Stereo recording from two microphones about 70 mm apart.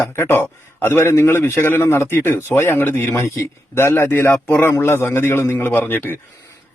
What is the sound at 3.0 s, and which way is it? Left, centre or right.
Speech, left.